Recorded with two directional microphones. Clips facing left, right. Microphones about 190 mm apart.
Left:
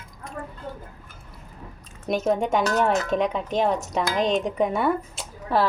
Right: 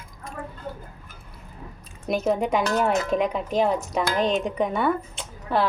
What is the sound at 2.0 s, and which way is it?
Speech, centre (ahead or behind).